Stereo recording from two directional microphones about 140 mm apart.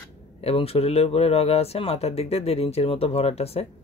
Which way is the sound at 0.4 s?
45° left (ahead or behind).